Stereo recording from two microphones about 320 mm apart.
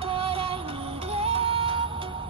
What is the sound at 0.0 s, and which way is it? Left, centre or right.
Music, centre.